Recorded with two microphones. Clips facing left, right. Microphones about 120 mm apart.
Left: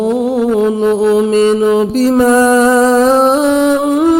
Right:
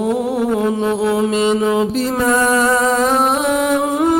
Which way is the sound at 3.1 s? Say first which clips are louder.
Left 6 dB; 30° left (ahead or behind).